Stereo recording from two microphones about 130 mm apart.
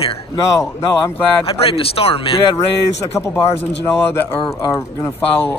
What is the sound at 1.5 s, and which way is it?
Speech, 45° left (ahead or behind).